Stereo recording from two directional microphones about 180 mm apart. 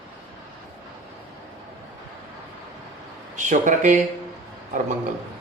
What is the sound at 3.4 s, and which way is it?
Speech, 45° right (ahead or behind).